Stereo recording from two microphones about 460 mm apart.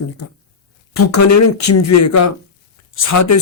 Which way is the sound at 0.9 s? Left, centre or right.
Left.